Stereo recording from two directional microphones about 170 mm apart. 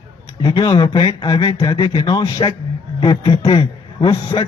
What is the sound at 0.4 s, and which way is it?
A man's voice, 25° left (ahead or behind).